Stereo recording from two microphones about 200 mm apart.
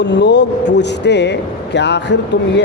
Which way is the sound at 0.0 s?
60° left (ahead or behind).